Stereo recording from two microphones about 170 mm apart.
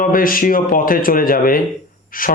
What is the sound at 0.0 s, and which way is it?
A man's voice, 55° left (ahead or behind).